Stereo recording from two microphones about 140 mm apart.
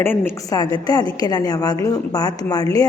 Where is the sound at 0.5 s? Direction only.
30° left (ahead or behind).